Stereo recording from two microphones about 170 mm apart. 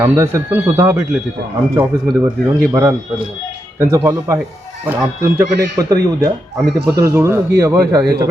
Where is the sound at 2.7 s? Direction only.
20° right (ahead or behind).